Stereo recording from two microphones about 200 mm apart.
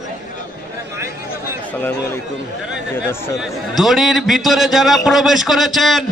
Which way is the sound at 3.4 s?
Centre (ahead or behind).